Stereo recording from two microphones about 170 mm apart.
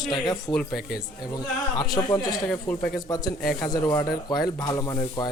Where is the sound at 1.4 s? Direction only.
20° left (ahead or behind).